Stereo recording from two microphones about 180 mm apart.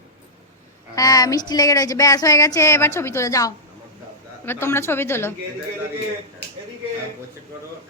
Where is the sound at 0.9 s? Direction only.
20° left (ahead or behind).